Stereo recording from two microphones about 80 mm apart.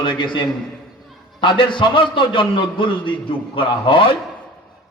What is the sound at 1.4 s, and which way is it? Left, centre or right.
Mantra, left.